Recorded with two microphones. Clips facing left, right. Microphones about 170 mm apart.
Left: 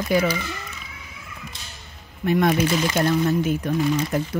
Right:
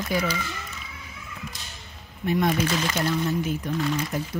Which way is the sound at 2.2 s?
65° left (ahead or behind).